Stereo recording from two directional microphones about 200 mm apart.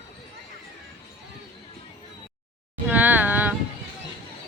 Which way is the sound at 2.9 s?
10° right (ahead or behind).